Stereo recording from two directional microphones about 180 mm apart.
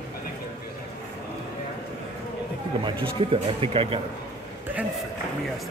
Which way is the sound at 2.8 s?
30° right (ahead or behind).